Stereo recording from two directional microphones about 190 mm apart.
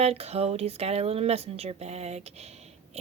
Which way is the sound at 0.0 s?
35° right (ahead or behind).